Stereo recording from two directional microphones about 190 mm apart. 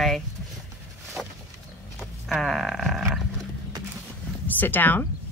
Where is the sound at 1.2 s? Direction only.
Centre (ahead or behind).